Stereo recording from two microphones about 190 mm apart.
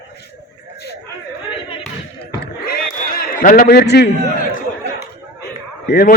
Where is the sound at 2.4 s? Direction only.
50° left (ahead or behind).